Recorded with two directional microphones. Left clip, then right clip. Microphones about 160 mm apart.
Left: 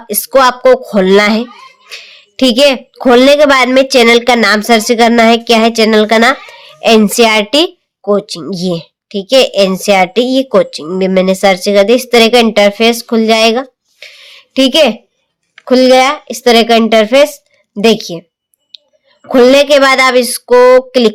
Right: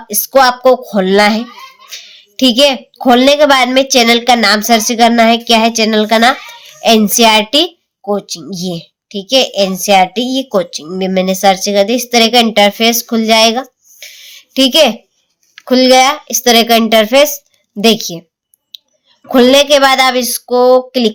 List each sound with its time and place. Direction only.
0.1 s speech: 35° left (ahead or behind)
18.7 s clicking: 20° left (ahead or behind)
19.3 s speech: 20° left (ahead or behind)